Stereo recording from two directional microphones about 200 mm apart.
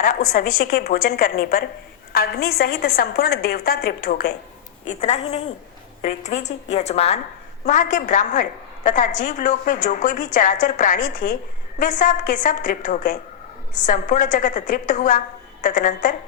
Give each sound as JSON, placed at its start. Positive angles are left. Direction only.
{"t": 0.3, "sound": "a woman's voice", "side_deg": 45}
{"t": 4.9, "sound": "a woman's voice", "side_deg": 35}